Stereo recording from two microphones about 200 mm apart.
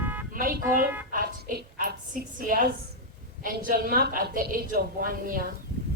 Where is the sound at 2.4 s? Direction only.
45° right (ahead or behind).